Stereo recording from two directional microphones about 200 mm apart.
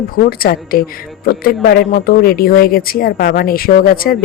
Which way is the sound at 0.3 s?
45° left (ahead or behind).